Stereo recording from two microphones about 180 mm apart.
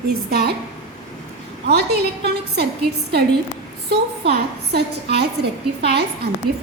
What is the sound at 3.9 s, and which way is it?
A woman's voice, 65° right (ahead or behind).